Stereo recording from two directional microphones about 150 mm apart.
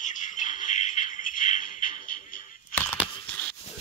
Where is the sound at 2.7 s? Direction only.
10° left (ahead or behind).